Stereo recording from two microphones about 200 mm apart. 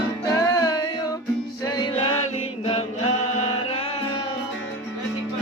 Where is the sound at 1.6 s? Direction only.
20° left (ahead or behind).